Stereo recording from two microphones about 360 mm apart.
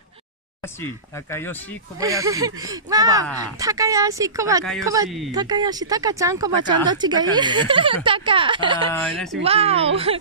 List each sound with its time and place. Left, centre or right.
0.6 s speech: centre
2.0 s speech: centre
4.6 s speech: centre
9.0 s speech: centre
9.4 s speech: centre